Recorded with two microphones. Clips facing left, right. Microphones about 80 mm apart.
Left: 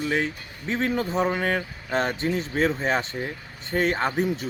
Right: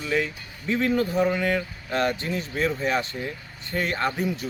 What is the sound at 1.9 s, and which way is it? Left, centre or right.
Speech, left.